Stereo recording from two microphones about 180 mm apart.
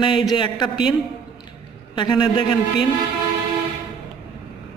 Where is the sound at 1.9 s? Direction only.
25° left (ahead or behind).